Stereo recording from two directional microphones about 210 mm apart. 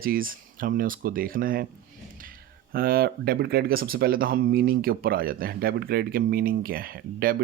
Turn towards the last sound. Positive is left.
turn(degrees=-45)  # may be behind; listen again after turning